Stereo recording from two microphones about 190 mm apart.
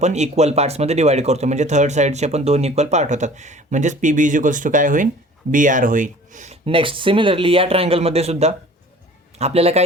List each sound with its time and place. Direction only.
0.0 s speech: 35° right (ahead or behind)